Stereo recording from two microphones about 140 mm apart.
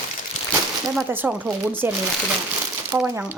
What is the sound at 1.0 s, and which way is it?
Speech, 15° right (ahead or behind).